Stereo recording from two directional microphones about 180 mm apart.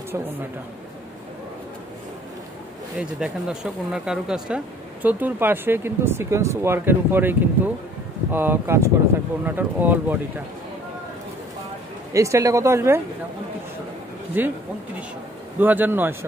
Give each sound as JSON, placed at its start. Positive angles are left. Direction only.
{"t": 3.0, "sound": "speech", "side_deg": -5}
{"t": 12.1, "sound": "speech", "side_deg": -15}
{"t": 14.3, "sound": "speech", "side_deg": -10}
{"t": 15.6, "sound": "speech", "side_deg": -10}